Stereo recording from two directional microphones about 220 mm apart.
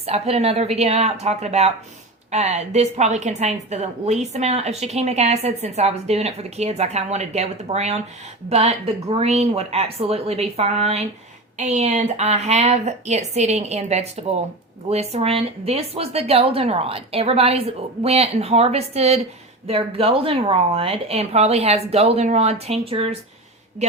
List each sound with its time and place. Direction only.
0.0 s a woman's voice: 30° right (ahead or behind)